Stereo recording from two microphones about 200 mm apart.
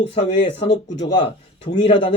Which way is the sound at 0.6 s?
60° left (ahead or behind).